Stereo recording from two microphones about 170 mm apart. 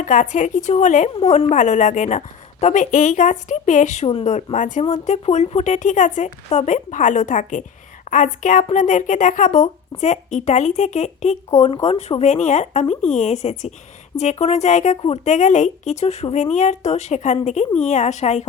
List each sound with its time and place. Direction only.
0.0 s a woman's voice: 45° left (ahead or behind)